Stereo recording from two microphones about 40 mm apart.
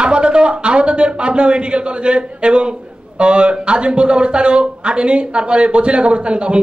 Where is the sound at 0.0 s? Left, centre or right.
Right.